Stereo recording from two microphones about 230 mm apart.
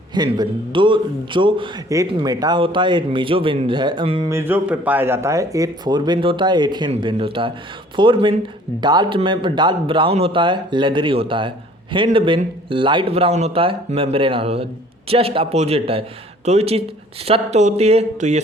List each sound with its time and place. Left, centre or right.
0.1 s speech: centre
4.3 s speech: centre; by 18.4 s right